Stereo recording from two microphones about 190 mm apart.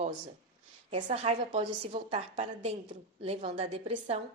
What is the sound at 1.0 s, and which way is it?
Speech, 35° right (ahead or behind).